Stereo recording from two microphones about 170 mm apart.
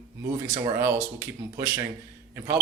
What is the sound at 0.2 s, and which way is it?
Speech, 20° right (ahead or behind).